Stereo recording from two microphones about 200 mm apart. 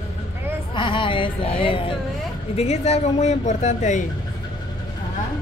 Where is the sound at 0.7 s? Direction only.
25° left (ahead or behind).